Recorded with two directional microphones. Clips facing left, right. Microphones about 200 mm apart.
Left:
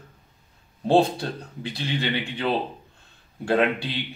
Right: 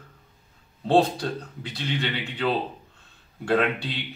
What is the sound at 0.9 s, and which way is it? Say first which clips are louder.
A man's voice: left 1 dB; 25° left (ahead or behind).